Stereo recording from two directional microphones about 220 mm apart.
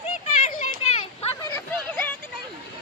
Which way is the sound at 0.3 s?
30° left (ahead or behind).